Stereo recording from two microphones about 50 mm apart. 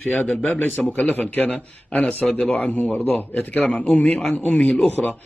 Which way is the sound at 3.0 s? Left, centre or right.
Left.